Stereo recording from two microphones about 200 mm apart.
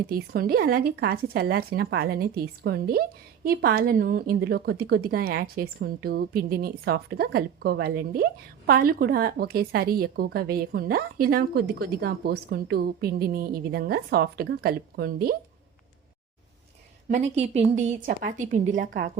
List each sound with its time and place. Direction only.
0.1 s a woman's voice: 50° right (ahead or behind)
17.1 s a woman's voice: 35° right (ahead or behind)